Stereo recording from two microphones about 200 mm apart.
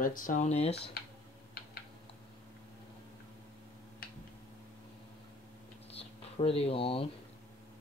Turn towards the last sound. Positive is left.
turn(degrees=30)  # may be behind; listen again after turning